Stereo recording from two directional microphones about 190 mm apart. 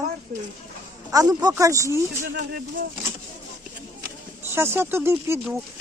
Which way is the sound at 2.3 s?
55° right (ahead or behind).